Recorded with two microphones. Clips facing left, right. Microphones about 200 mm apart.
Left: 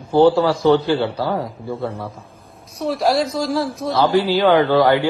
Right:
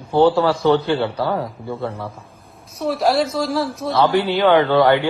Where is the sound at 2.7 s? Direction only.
Centre (ahead or behind).